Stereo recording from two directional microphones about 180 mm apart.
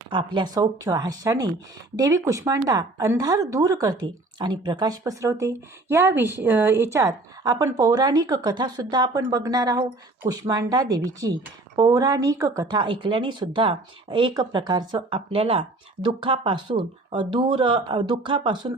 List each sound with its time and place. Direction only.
0.1 s speech: 25° right (ahead or behind)